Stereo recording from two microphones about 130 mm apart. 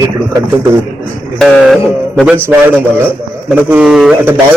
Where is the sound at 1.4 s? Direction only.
Centre (ahead or behind).